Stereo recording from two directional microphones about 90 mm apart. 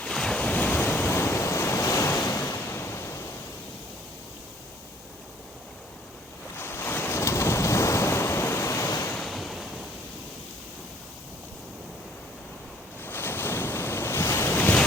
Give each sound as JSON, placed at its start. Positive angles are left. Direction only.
{"t": 0.0, "sound": "waves", "side_deg": 5}
{"t": 2.4, "sound": "waves", "side_deg": 30}
{"t": 6.6, "sound": "waves", "side_deg": 25}
{"t": 9.2, "sound": "waves", "side_deg": 0}
{"t": 13.0, "sound": "waves", "side_deg": 25}